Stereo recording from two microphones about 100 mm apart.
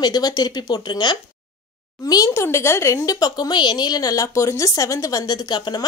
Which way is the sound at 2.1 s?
35° left (ahead or behind).